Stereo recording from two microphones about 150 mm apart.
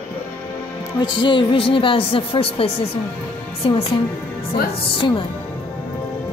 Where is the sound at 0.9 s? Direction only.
30° left (ahead or behind).